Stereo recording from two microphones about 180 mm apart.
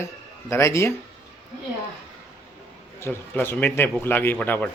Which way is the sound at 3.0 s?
10° left (ahead or behind).